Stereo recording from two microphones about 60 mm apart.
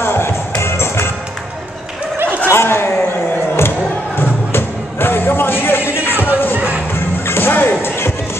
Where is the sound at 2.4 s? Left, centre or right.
Left.